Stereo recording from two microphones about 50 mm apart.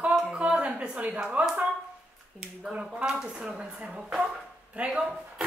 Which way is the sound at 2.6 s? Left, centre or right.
Centre.